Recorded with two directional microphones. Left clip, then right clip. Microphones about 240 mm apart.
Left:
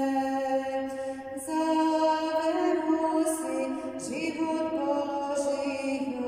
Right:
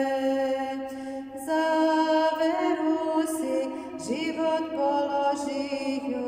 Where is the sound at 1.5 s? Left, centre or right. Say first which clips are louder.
Right 3 dB; right.